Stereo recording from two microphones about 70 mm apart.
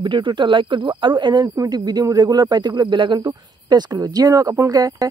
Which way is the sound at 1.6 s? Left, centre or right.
Right.